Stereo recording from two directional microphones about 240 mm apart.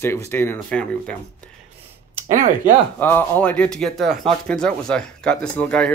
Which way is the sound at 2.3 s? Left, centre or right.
Right.